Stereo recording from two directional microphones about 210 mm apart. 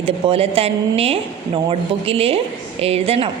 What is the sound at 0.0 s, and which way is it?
A woman's voice, 25° right (ahead or behind).